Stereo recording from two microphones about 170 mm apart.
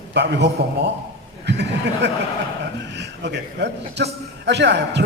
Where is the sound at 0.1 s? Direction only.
90° right.